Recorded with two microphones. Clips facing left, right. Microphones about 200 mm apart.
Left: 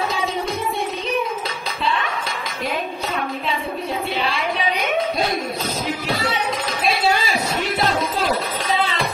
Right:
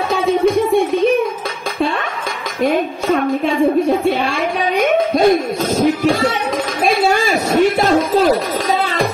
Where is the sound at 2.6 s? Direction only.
50° right (ahead or behind).